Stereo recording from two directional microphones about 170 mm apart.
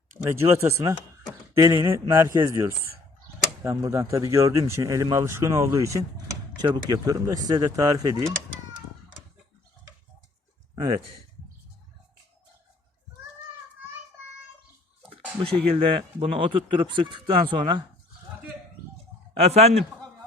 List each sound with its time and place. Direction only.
0.3 s speech: 15° right (ahead or behind)
15.7 s speech: 35° right (ahead or behind)
19.4 s a man's voice: 40° right (ahead or behind)